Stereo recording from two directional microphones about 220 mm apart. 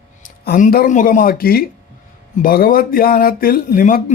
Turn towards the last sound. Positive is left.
turn(degrees=40)  # may be behind; listen again after turning